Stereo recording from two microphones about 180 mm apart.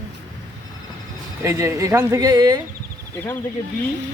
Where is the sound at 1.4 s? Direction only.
15° right (ahead or behind).